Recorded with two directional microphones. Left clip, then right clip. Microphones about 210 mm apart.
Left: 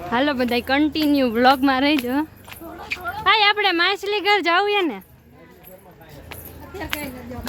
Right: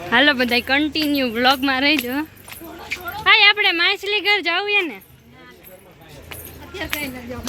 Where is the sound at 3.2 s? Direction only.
20° left (ahead or behind).